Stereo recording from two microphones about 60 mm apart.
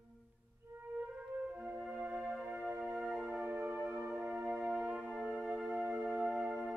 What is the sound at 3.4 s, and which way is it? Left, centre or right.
Music, right.